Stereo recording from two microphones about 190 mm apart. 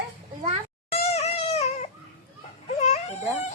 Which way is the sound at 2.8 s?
35° left (ahead or behind).